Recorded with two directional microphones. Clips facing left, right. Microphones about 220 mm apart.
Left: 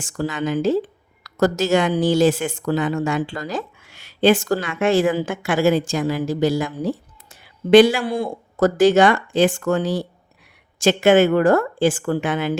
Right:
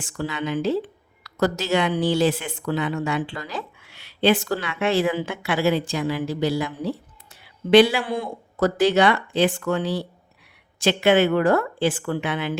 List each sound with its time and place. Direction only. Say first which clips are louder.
0.0 s speech: left 4 dB; 45° left (ahead or behind)